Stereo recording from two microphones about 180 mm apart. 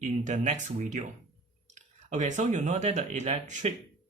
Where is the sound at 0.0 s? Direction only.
40° right (ahead or behind).